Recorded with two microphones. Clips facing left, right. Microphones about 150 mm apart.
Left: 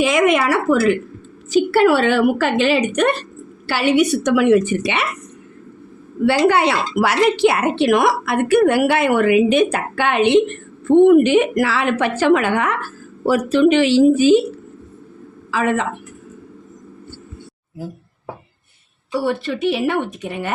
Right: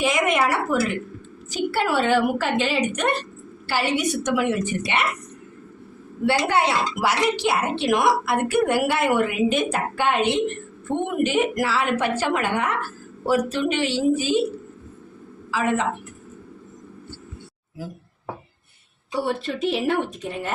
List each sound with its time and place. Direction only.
0.0 s speech: 90° left
1.5 s a woman's voice: 75° left (ahead or behind); by 5.0 s 90° left
6.2 s a woman's voice: 85° left
15.5 s a woman's voice: 70° left (ahead or behind)
19.2 s a woman's voice: 75° left (ahead or behind)